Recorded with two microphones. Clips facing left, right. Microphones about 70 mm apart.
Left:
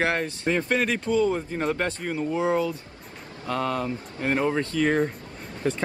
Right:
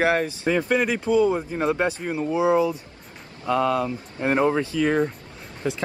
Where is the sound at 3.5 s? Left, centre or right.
Centre.